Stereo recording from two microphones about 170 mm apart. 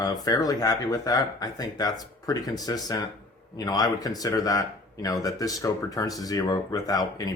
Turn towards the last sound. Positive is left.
turn(degrees=20)  # may be behind; listen again after turning